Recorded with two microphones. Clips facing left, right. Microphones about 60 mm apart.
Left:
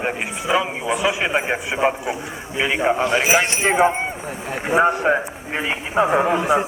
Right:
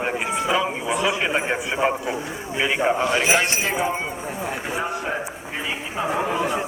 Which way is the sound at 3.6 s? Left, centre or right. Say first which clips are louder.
Left 6 dB; left.